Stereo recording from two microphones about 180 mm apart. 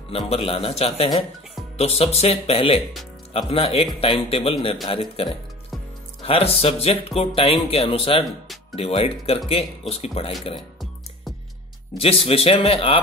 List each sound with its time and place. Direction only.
0.3 s speech: 30° left (ahead or behind)
12.0 s speech: 30° left (ahead or behind)